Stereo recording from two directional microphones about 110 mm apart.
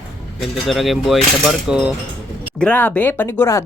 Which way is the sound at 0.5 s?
Centre (ahead or behind).